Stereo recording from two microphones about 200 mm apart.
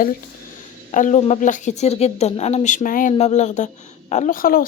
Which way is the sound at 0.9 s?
40° left (ahead or behind).